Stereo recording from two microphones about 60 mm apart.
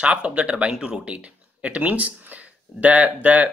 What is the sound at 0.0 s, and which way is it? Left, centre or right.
Speech, centre.